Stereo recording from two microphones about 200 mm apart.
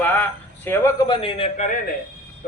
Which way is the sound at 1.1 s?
25° left (ahead or behind).